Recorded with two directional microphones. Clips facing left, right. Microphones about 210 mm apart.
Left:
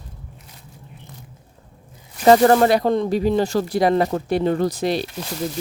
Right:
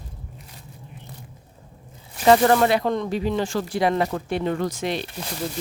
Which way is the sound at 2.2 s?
40° left (ahead or behind).